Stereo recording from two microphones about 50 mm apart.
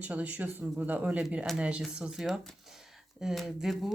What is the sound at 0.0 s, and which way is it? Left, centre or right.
Speech, right.